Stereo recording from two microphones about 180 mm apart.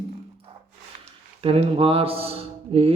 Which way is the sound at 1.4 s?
35° right (ahead or behind).